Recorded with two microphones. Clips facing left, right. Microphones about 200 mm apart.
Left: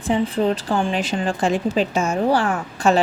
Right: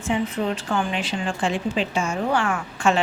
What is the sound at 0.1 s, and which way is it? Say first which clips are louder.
Speech: left 5 dB; 35° left (ahead or behind).